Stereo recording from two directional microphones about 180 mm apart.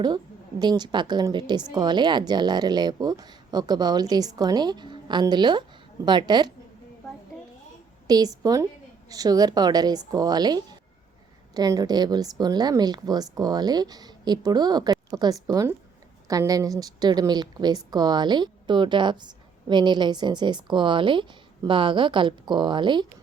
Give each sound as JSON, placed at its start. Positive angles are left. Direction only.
{"t": 0.6, "sound": "a woman's voice", "side_deg": -25}
{"t": 8.0, "sound": "a woman's voice", "side_deg": -20}